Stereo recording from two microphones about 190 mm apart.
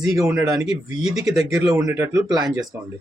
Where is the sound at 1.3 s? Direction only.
Centre (ahead or behind).